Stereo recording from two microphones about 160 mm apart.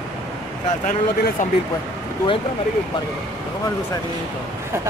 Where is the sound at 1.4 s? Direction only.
55° left (ahead or behind).